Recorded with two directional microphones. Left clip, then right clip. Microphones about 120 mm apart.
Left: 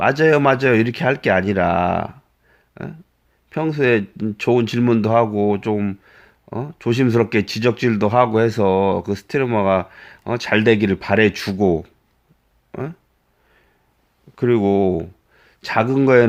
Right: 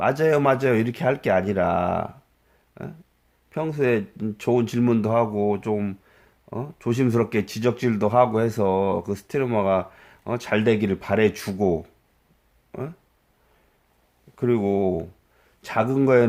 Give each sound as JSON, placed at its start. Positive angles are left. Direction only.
{"t": 0.0, "sound": "speech", "side_deg": 25}
{"t": 14.3, "sound": "speech", "side_deg": 25}